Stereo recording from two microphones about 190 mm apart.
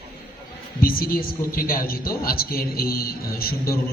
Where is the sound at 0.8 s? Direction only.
50° left (ahead or behind).